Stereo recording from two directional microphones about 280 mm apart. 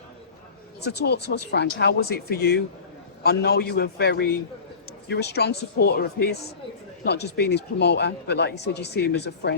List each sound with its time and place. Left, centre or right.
0.8 s speech: left